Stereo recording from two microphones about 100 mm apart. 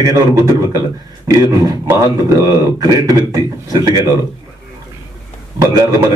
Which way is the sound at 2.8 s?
35° right (ahead or behind).